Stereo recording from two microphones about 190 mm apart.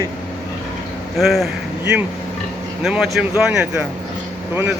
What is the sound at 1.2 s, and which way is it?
Speech, centre (ahead or behind).